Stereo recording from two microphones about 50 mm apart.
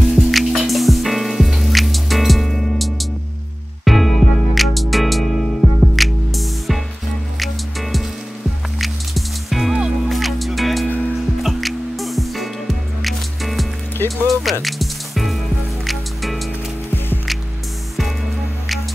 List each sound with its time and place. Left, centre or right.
0.1 s music: centre
9.7 s music: centre
10.0 s music: centre